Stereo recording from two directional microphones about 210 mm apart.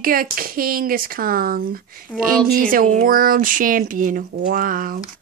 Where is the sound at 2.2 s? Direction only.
40° right (ahead or behind).